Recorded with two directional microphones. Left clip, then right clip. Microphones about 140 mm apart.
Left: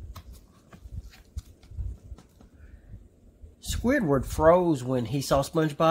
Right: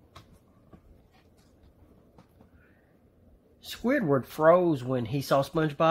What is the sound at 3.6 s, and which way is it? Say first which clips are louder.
Speech: left 1 dB; 25° left (ahead or behind).